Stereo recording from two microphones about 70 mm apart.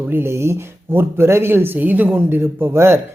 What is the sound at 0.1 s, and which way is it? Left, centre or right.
Speech, right.